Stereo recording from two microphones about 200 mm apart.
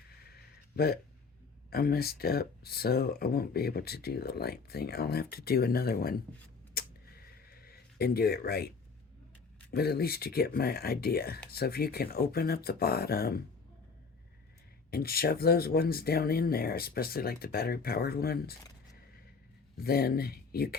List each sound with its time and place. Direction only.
0.3 s a sound: 50° left (ahead or behind)
1.7 s speech: 50° left (ahead or behind)
6.7 s a sound: 50° left (ahead or behind)
9.7 s speech: 50° left (ahead or behind)
14.8 s speech: 50° left (ahead or behind)
19.7 s speech: 50° left (ahead or behind)